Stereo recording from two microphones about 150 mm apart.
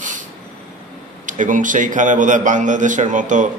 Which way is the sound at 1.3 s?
55° right (ahead or behind).